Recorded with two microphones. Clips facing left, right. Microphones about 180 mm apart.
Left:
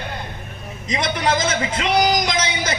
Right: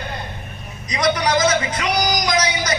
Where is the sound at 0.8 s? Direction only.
25° left (ahead or behind).